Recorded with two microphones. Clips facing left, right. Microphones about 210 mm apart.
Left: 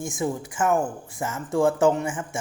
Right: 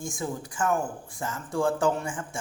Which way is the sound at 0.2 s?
25° left (ahead or behind).